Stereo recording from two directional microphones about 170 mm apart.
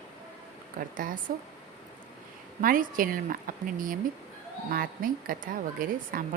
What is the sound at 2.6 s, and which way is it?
A woman's voice, 55° right (ahead or behind).